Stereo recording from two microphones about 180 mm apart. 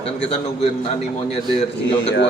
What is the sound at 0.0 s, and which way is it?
A man's voice, 35° left (ahead or behind).